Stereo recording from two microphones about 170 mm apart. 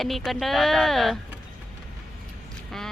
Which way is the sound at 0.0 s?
Centre (ahead or behind).